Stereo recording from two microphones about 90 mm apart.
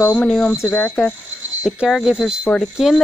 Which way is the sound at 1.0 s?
5° right (ahead or behind).